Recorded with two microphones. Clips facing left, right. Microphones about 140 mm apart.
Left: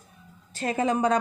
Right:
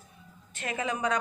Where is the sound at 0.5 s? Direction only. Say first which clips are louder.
Left 8 dB; 35° left (ahead or behind).